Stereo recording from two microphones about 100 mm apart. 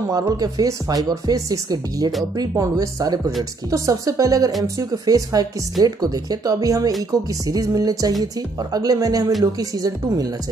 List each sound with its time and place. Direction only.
0.4 s speech: 40° right (ahead or behind)